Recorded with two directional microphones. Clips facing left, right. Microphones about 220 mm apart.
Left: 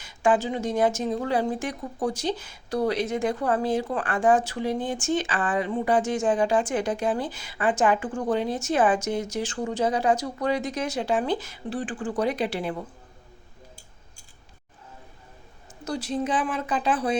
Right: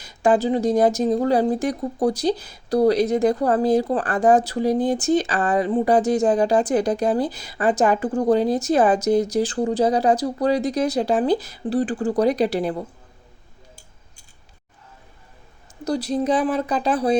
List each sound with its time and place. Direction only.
0.0 s speech: 40° right (ahead or behind)
15.8 s speech: 40° right (ahead or behind)